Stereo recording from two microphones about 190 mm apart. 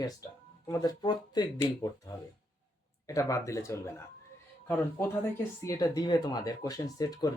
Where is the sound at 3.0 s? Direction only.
15° left (ahead or behind).